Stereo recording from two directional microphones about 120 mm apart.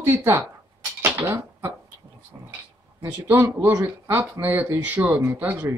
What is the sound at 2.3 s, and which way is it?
Speech, 30° right (ahead or behind).